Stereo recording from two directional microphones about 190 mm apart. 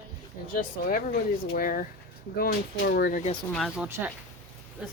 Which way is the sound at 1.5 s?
50° left (ahead or behind).